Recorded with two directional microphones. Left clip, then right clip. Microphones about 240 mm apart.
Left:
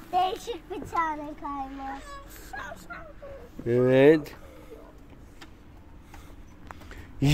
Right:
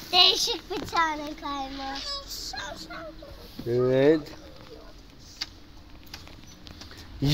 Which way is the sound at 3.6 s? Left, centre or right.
Left.